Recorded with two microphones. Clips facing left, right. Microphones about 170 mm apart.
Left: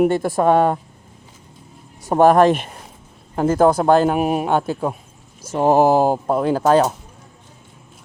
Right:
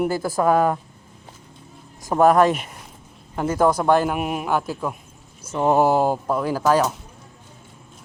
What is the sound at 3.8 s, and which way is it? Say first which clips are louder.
Speech: left 4 dB; 35° left (ahead or behind).